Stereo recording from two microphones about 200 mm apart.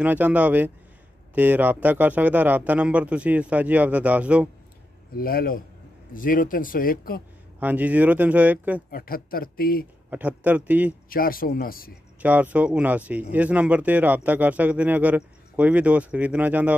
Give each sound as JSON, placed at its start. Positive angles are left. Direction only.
{"t": 0.0, "sound": "speech", "side_deg": -10}
{"t": 5.1, "sound": "speech", "side_deg": 50}
{"t": 7.6, "sound": "speech", "side_deg": -10}
{"t": 8.9, "sound": "speech", "side_deg": 45}
{"t": 10.0, "sound": "speech", "side_deg": -10}
{"t": 11.1, "sound": "speech", "side_deg": 45}
{"t": 12.2, "sound": "speech", "side_deg": -10}